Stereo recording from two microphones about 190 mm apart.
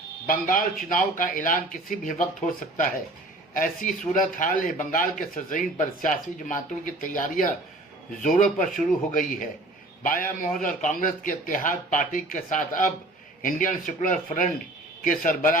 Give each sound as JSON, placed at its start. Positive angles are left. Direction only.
{"t": 0.3, "sound": "speech", "side_deg": 45}